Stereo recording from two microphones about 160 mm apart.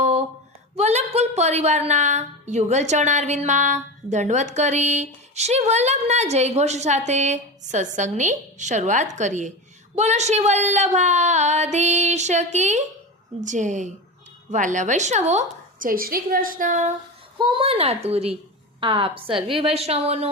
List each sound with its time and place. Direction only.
0.0 s a sound: 40° right (ahead or behind)
0.8 s a woman's voice: 45° right (ahead or behind)
15.9 s a woman's voice: 65° right (ahead or behind)
17.3 s a woman's voice: 30° right (ahead or behind)